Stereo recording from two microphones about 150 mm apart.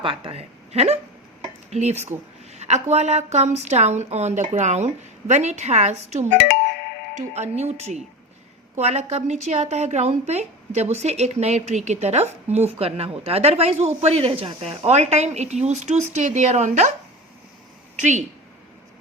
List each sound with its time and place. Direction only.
0.0 s a woman's voice: 35° right (ahead or behind); by 16.9 s 50° right (ahead or behind)
17.9 s speech: 50° right (ahead or behind)